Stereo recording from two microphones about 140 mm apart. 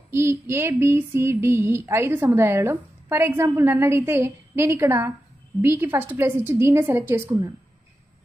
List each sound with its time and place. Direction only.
0.1 s female singing: 15° right (ahead or behind)